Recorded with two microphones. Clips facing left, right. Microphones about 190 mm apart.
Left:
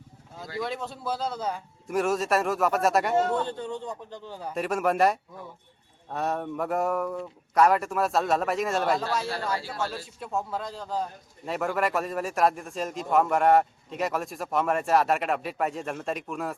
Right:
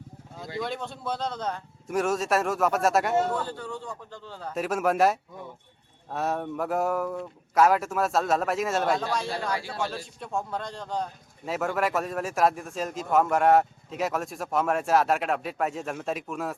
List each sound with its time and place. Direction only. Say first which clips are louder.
0.6 s speech: left 1 dB; centre (ahead or behind)
3.3 s a man's voice: left 3 dB; 20° left (ahead or behind)
4.5 s speech: even; centre (ahead or behind)
9.5 s speech: even; 15° right (ahead or behind)
9.9 s speech: even; 5° left (ahead or behind)